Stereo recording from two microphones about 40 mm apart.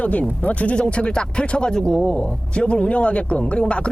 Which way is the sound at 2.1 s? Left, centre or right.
Left.